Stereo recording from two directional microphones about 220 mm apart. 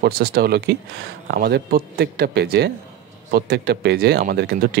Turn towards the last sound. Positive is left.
turn(degrees=-45)  # may be behind; listen again after turning